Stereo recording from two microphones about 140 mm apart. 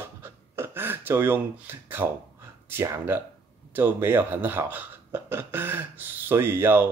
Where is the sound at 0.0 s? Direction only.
15° right (ahead or behind).